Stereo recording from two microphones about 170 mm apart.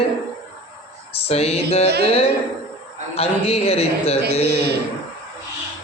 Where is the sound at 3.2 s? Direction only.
35° left (ahead or behind).